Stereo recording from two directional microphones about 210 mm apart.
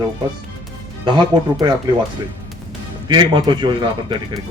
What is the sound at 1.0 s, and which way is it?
Speech, 20° right (ahead or behind).